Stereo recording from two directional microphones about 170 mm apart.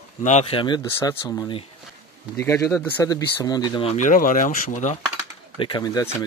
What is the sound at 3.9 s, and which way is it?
Speech, 45° left (ahead or behind).